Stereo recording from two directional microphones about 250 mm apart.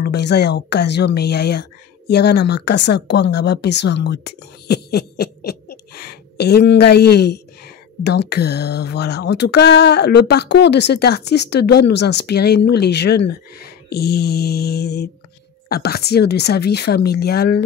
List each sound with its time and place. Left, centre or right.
0.0 s speech: left